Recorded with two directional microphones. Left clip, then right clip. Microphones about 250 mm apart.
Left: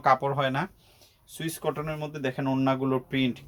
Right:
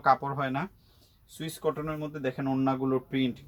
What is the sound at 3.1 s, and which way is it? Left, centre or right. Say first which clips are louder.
Speech: left 2 dB; left.